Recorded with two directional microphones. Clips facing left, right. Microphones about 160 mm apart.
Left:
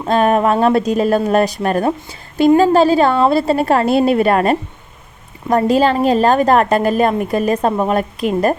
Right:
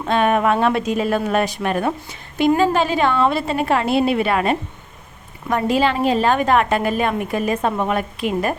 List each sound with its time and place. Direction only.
0.1 s a woman's voice: 40° left (ahead or behind)